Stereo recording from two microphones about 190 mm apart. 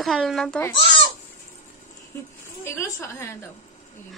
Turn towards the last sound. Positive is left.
turn(degrees=15)  # may be behind; listen again after turning